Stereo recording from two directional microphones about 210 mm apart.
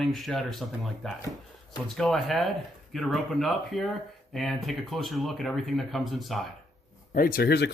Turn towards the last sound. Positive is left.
turn(degrees=50)  # may be behind; listen again after turning